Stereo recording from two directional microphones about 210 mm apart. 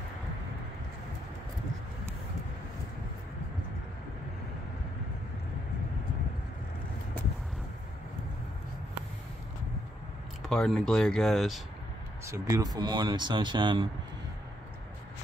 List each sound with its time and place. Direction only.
10.4 s speech: centre (ahead or behind)
12.3 s speech: 15° right (ahead or behind)